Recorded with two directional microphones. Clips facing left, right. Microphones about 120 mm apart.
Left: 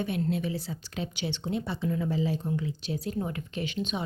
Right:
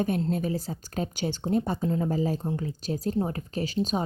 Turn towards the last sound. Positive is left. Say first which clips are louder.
# right 5 dB
turn(degrees=-40)  # may be behind; listen again after turning